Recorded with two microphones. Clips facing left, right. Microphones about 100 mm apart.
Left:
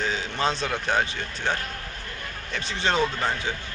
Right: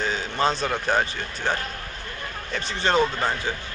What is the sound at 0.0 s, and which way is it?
A woman's voice, centre (ahead or behind).